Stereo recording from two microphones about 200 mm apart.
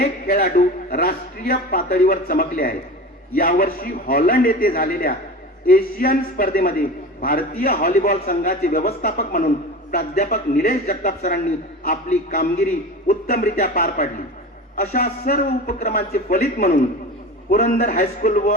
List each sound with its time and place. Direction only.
0.0 s a man's voice: 45° left (ahead or behind)